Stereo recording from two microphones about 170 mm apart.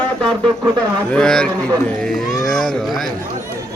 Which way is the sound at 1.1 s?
5° left (ahead or behind).